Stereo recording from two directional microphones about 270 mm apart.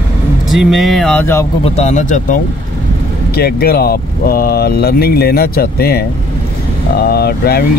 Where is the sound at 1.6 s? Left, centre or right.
Left.